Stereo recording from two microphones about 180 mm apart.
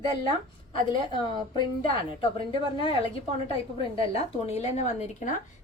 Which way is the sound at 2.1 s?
25° left (ahead or behind).